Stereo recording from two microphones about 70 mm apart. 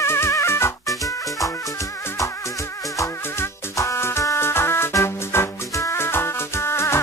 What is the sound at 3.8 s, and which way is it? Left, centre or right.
Music, left.